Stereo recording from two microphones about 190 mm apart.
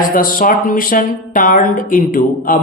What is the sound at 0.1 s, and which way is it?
Speech, 45° left (ahead or behind).